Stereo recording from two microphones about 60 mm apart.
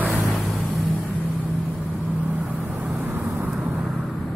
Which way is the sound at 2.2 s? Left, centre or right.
Right.